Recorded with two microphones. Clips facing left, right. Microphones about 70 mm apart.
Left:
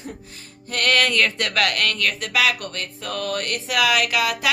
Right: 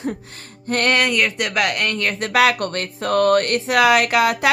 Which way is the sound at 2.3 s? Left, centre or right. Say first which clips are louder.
Right 8 dB; right.